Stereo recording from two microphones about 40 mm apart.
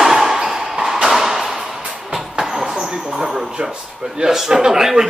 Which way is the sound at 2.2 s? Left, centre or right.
Centre.